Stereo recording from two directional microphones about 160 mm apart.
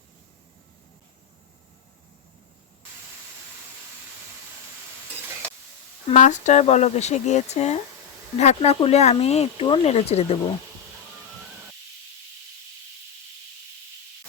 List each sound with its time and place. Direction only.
6.1 s speech: 50° left (ahead or behind)